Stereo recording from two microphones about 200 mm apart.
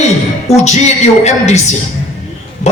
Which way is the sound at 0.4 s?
35° left (ahead or behind).